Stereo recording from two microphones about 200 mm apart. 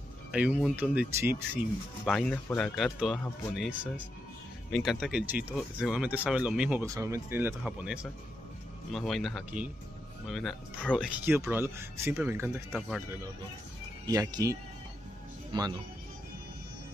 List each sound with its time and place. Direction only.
0.3 s speech: 5° right (ahead or behind)
2.0 s speech: 5° left (ahead or behind)
11.2 s speech: 10° right (ahead or behind)
14.0 s speech: 15° right (ahead or behind)